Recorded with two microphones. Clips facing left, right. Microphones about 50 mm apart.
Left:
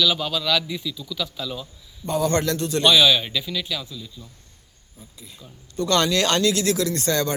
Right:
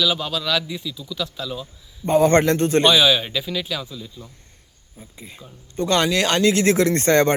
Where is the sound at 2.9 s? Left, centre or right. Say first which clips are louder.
Right 1 dB; centre; by 5.4 s right.